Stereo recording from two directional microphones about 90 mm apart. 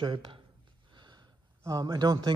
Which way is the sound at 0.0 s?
60° right (ahead or behind).